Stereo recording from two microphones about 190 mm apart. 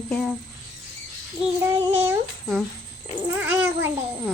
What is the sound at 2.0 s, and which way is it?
A child's voice, 5° right (ahead or behind).